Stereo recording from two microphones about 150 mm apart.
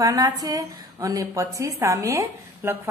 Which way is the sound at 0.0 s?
25° right (ahead or behind).